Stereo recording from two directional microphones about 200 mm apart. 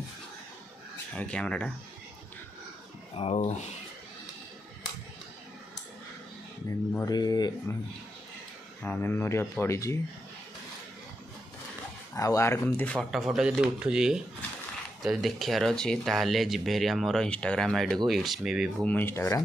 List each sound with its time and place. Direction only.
1.1 s speech: 5° left (ahead or behind)
3.2 s speech: 30° left (ahead or behind)
7.1 s speech: 20° left (ahead or behind)
8.8 s speech: 10° left (ahead or behind)
12.2 s speech: 15° left (ahead or behind)